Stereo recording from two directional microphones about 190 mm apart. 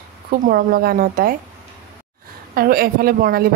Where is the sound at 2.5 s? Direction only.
50° right (ahead or behind).